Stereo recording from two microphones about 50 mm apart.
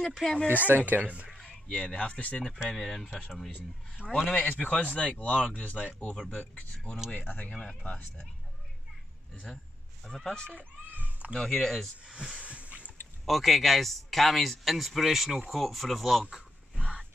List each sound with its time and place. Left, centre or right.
0.0 s speech: centre
0.7 s speech: right
1.7 s speech: left
2.5 s speech: centre
4.0 s speech: centre
4.4 s speech: left
7.1 s speech: left
9.5 s speech: centre
10.9 s cat: right
11.3 s speech: centre
12.1 s speech: centre
12.4 s a sound: right
13.2 s speech: centre